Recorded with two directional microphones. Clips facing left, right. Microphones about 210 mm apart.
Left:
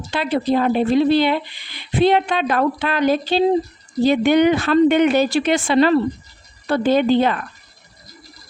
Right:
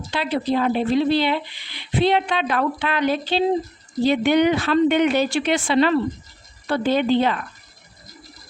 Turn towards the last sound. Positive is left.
turn(degrees=45)  # may be behind; listen again after turning